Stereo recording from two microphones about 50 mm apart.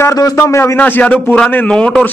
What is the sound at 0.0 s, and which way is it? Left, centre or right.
Speech, left.